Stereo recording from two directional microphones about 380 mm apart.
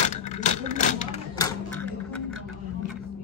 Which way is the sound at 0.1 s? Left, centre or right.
Centre.